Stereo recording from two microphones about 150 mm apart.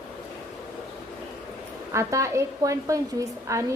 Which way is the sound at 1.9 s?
20° right (ahead or behind).